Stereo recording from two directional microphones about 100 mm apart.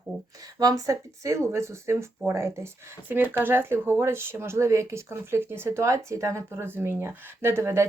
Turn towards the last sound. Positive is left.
turn(degrees=-25)  # may be behind; listen again after turning